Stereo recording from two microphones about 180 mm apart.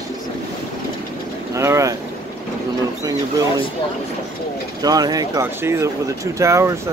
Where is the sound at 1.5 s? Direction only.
15° right (ahead or behind).